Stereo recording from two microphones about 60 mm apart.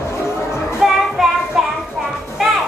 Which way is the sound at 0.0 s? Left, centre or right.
Left.